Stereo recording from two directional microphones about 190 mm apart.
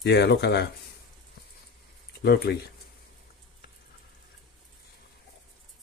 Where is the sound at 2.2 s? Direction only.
55° left (ahead or behind).